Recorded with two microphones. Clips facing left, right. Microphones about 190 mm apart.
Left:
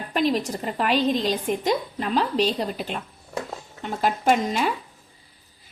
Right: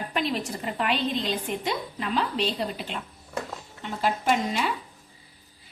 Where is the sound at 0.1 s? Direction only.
40° left (ahead or behind).